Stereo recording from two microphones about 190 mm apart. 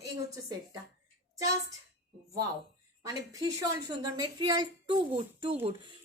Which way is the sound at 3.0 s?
20° right (ahead or behind).